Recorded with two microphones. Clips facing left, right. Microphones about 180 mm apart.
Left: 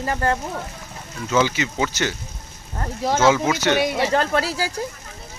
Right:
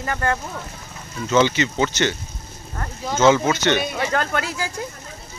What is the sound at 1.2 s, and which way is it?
Speech, 5° left (ahead or behind).